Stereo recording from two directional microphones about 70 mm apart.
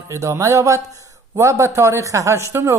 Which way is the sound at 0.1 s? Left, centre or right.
Right.